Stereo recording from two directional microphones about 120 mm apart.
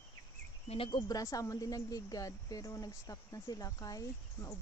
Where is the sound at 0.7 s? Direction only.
50° left (ahead or behind).